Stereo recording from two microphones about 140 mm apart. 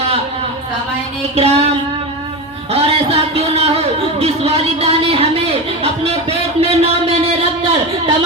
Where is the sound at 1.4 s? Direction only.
45° right (ahead or behind).